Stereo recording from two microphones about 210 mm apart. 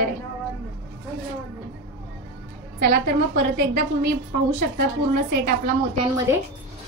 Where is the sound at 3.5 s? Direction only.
45° right (ahead or behind).